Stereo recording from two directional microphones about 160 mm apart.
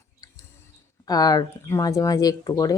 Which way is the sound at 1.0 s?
25° left (ahead or behind).